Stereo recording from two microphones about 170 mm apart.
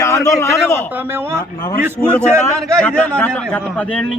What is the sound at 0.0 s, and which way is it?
Speech, 15° left (ahead or behind).